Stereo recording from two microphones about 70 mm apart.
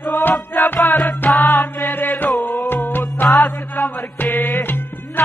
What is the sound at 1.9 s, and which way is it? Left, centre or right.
Music, left.